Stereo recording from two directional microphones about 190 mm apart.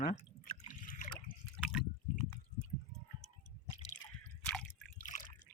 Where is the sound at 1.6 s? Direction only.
5° left (ahead or behind).